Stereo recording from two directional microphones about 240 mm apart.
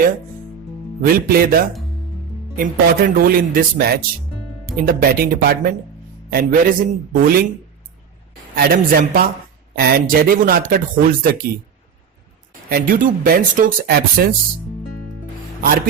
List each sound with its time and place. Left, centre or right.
1.0 s speech: right
8.5 s speech: right
12.6 s speech: right